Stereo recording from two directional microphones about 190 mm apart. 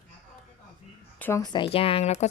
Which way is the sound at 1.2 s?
15° left (ahead or behind).